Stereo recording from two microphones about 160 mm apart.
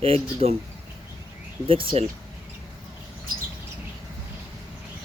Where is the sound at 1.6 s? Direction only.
35° right (ahead or behind).